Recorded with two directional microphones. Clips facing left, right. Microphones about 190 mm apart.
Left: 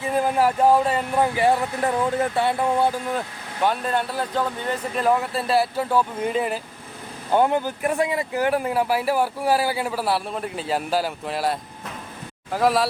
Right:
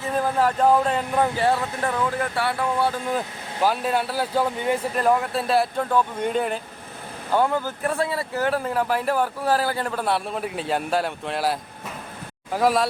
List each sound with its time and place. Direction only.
0.0 s speech: 15° left (ahead or behind)
3.1 s speech: centre (ahead or behind)
4.9 s speech: centre (ahead or behind)
7.3 s speech: 20° left (ahead or behind); by 12.9 s centre (ahead or behind)